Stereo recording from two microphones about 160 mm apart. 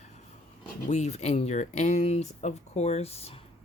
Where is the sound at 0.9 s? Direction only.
45° left (ahead or behind).